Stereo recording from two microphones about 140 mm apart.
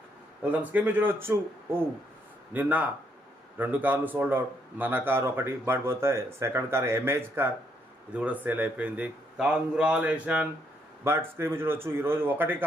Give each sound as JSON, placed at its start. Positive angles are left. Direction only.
{"t": 0.4, "sound": "speech", "side_deg": -10}